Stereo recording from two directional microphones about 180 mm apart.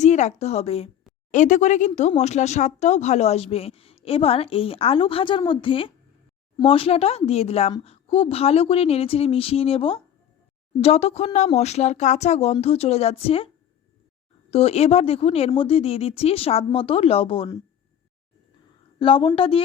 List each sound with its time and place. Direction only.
0.0 s a woman's voice: 40° left (ahead or behind)
1.3 s speech: 45° left (ahead or behind)
14.5 s speech: 35° left (ahead or behind)
18.9 s a woman's voice: 30° left (ahead or behind)